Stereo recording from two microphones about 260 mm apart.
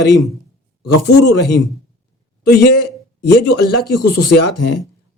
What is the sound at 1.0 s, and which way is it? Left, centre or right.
A man's voice, left.